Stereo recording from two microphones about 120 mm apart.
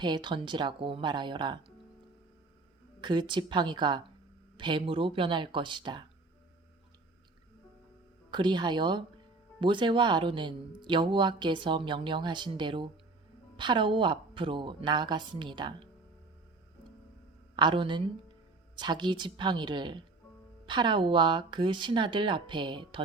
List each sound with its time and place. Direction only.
0.0 s speech: 40° right (ahead or behind)
3.0 s speech: 40° right (ahead or behind)
8.3 s speech: 40° right (ahead or behind)
17.6 s speech: 40° right (ahead or behind)